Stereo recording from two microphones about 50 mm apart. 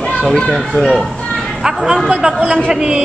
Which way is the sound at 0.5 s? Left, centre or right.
Centre.